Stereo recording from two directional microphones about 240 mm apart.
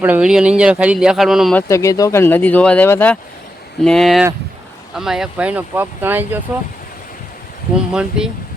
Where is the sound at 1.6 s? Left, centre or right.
Centre.